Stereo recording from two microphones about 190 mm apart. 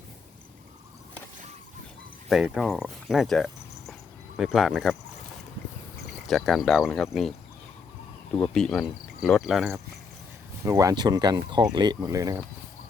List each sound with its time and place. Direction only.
2.3 s speech: centre (ahead or behind)
6.2 s speech: centre (ahead or behind)
8.4 s speech: centre (ahead or behind)
10.7 s speech: 20° right (ahead or behind)